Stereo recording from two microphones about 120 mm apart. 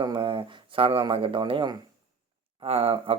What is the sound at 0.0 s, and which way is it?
Speech, 40° right (ahead or behind).